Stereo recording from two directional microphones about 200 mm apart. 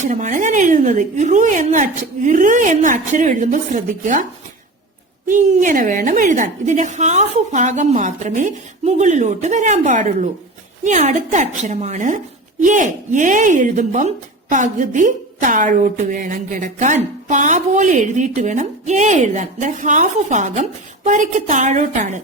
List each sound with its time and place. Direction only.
0.0 s a woman's voice: 40° right (ahead or behind)